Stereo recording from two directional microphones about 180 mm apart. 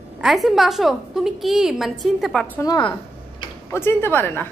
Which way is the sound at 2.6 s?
20° left (ahead or behind).